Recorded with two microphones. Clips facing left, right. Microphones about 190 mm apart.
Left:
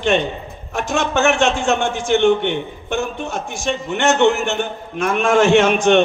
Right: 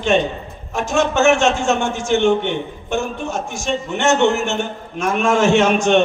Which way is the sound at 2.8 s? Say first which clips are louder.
Right 1 dB; 60° left (ahead or behind).